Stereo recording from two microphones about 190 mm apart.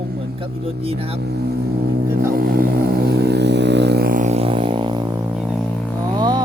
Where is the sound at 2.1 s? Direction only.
50° right (ahead or behind); by 5.0 s 25° right (ahead or behind).